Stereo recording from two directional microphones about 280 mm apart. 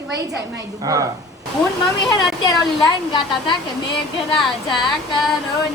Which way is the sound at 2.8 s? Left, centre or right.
Centre.